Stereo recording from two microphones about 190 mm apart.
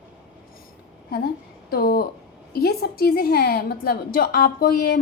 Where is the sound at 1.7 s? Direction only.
55° left (ahead or behind).